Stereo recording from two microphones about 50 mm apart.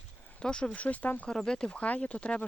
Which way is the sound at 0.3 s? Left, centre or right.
Centre.